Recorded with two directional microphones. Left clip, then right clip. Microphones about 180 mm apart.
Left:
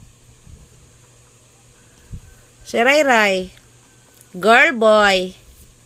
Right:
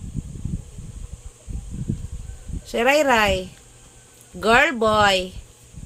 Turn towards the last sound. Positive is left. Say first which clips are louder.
# left 5 dB
turn(degrees=25)  # may be behind; listen again after turning